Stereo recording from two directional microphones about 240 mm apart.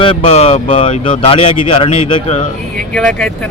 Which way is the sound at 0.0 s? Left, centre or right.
Left.